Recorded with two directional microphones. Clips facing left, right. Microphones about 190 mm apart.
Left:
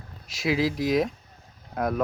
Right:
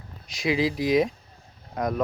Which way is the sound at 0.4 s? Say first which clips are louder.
Right 1 dB; centre (ahead or behind).